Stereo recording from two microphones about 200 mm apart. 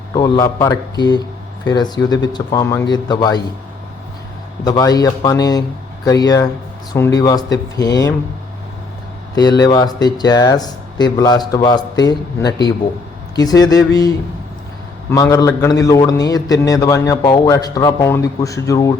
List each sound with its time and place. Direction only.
0.1 s speech: 20° left (ahead or behind)
4.6 s speech: 20° left (ahead or behind)
9.3 s speech: 20° left (ahead or behind)
15.1 s a man's voice: 15° left (ahead or behind)